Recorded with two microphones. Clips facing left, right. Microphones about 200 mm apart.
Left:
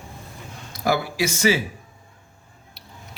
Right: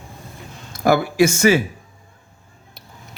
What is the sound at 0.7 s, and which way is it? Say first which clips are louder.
Speech: right 7 dB; 50° right (ahead or behind).